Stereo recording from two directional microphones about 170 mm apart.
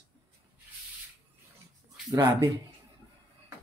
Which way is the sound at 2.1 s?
20° right (ahead or behind).